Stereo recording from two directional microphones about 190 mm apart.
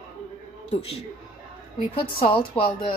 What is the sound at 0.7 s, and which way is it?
A man's voice, 30° left (ahead or behind).